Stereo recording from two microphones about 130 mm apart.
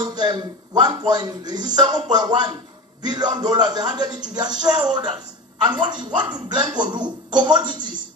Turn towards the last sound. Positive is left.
turn(degrees=-35)  # may be behind; listen again after turning